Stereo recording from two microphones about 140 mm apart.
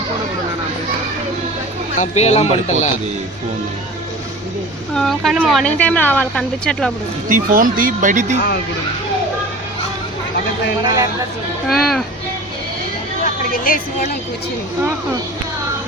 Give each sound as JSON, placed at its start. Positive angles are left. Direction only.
{"t": 2.0, "sound": "speech", "side_deg": 55}
{"t": 4.9, "sound": "speech", "side_deg": 0}
{"t": 5.7, "sound": "a woman's voice", "side_deg": 10}
{"t": 7.3, "sound": "speech", "side_deg": -75}
{"t": 10.8, "sound": "speech", "side_deg": -25}
{"t": 11.7, "sound": "speech", "side_deg": 0}
{"t": 13.2, "sound": "a woman's voice", "side_deg": 85}